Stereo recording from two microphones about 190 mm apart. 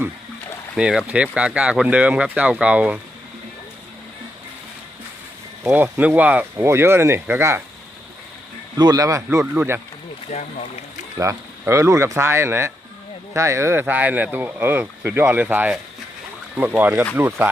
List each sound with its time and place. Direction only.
0.8 s speech: 5° right (ahead or behind)
5.6 s speech: 10° right (ahead or behind)
8.8 s speech: 20° right (ahead or behind)
10.3 s speech: 35° left (ahead or behind)
11.2 s speech: 15° right (ahead or behind)